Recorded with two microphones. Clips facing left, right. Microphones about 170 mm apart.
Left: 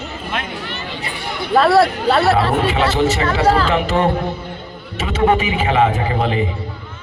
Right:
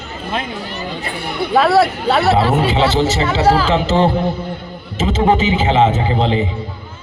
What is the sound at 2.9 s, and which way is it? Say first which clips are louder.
Speech: right 1 dB; 25° right (ahead or behind).